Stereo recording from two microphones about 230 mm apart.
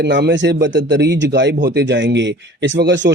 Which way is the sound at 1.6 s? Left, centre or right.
Right.